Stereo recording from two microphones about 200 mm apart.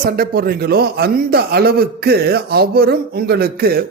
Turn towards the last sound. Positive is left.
turn(degrees=-50)  # may be behind; listen again after turning